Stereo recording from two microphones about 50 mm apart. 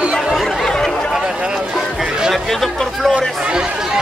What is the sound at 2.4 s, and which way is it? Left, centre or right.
Speech, centre.